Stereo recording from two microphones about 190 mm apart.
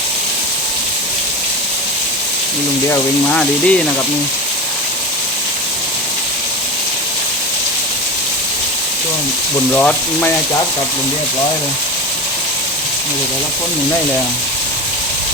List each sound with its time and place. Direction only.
2.9 s speech: 5° left (ahead or behind)
9.7 s speech: 5° left (ahead or behind)